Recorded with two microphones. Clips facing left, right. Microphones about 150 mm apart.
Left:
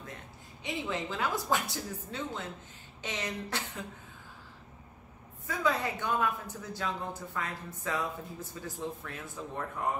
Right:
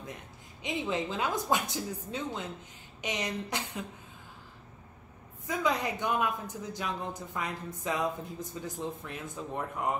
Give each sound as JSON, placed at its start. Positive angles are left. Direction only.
{"t": 0.6, "sound": "a woman's voice", "side_deg": -20}
{"t": 5.5, "sound": "speech", "side_deg": -15}